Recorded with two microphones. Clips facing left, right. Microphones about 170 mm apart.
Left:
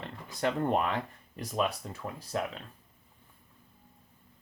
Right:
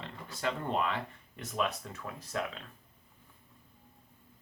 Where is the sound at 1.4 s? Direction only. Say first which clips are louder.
Left 3 dB; 35° left (ahead or behind).